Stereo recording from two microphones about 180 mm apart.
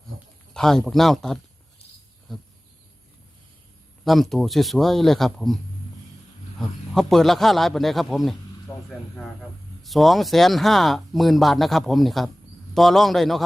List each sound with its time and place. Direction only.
0.5 s speech: 5° left (ahead or behind)
4.0 s speech: centre (ahead or behind)
6.6 s a man's voice: centre (ahead or behind)